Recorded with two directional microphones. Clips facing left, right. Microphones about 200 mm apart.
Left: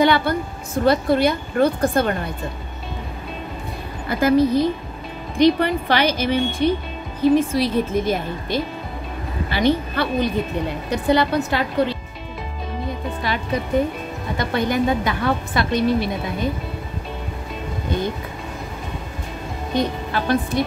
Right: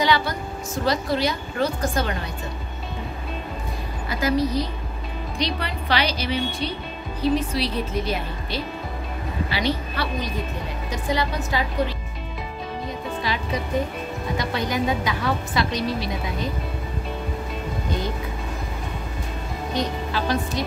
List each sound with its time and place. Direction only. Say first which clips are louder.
0.0 s speech: left 5 dB; 55° left (ahead or behind)
4.1 s speech: left 6 dB; 55° left (ahead or behind)
10.9 s speech: left 7 dB; 65° left (ahead or behind)
14.4 s speech: left 6 dB; 55° left (ahead or behind)
19.8 s speech: left 3 dB; 55° left (ahead or behind)